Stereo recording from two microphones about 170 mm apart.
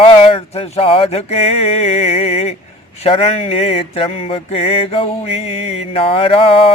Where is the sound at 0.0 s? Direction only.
35° left (ahead or behind).